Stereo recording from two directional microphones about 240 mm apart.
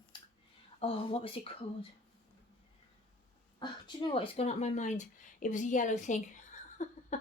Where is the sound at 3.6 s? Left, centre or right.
Centre.